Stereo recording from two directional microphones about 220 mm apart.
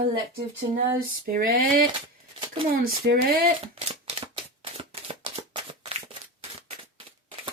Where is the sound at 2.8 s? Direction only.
45° right (ahead or behind).